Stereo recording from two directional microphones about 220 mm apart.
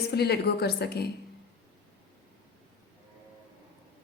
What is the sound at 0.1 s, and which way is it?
Speech, 45° left (ahead or behind).